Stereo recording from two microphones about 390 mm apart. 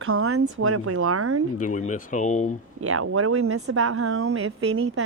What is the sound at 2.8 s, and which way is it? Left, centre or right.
Speech, right.